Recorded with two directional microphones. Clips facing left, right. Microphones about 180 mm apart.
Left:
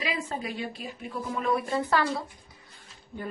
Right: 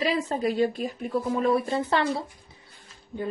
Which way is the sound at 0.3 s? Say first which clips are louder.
Right 10 dB; 40° right (ahead or behind).